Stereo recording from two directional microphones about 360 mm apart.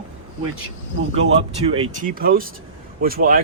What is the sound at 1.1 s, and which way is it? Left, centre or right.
Speech, centre.